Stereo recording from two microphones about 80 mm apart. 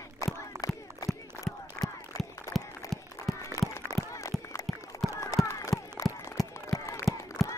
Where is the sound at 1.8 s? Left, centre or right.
Left.